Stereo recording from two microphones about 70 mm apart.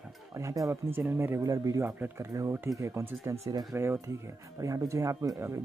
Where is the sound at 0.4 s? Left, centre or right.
Right.